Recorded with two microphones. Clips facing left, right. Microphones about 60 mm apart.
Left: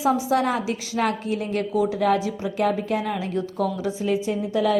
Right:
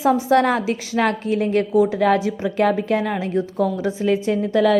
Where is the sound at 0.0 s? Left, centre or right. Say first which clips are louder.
Right 5 dB; right.